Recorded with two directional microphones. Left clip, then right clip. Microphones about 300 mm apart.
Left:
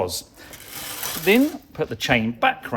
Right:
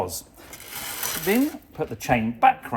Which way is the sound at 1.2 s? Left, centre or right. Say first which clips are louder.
Left 6 dB; left.